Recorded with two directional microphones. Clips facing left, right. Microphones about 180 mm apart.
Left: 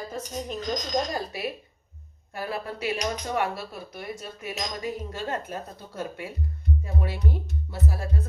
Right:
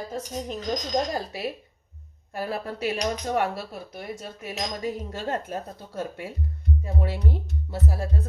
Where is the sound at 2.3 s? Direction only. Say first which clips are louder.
Right 2 dB; 40° right (ahead or behind).